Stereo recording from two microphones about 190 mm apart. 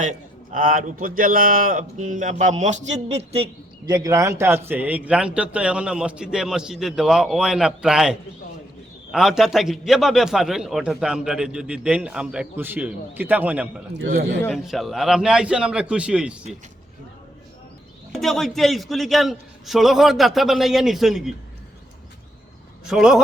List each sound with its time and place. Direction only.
0.5 s speech: 45° right (ahead or behind); by 3.9 s 30° right (ahead or behind)
3.9 s a man's voice: 15° right (ahead or behind)
9.1 s a man's voice: centre (ahead or behind)
18.1 s a man's voice: centre (ahead or behind)
22.9 s a man's voice: 5° right (ahead or behind)